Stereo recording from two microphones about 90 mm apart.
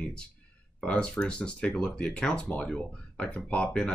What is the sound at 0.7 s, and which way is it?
Speech, 10° left (ahead or behind).